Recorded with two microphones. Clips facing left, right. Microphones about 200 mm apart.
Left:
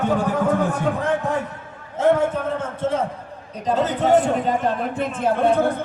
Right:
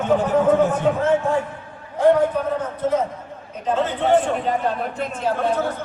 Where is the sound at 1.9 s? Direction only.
25° left (ahead or behind).